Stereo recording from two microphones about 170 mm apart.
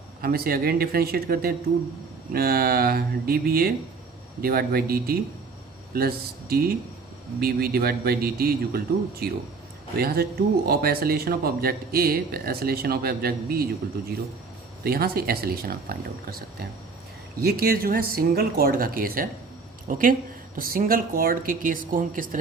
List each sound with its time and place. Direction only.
0.2 s speech: 60° right (ahead or behind)
10.0 s speech: 65° right (ahead or behind)
14.8 s a woman's voice: 65° right (ahead or behind)